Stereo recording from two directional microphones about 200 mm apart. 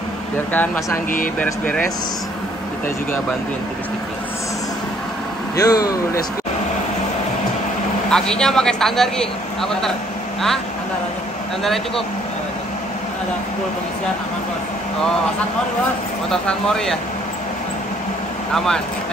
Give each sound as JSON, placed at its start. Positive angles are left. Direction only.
{"t": 0.5, "sound": "speech", "side_deg": 10}
{"t": 5.6, "sound": "speech", "side_deg": 20}
{"t": 8.1, "sound": "a man's voice", "side_deg": 5}
{"t": 11.6, "sound": "a man's voice", "side_deg": 0}
{"t": 16.3, "sound": "a man's voice", "side_deg": 5}